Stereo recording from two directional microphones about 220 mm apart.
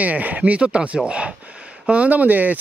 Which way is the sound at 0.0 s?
5° right (ahead or behind).